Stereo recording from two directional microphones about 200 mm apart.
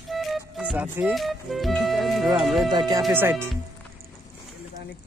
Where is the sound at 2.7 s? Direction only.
20° right (ahead or behind).